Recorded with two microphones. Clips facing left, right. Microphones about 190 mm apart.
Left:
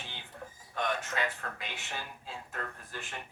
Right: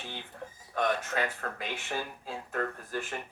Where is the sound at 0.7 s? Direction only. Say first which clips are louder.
Right 4 dB; 45° right (ahead or behind).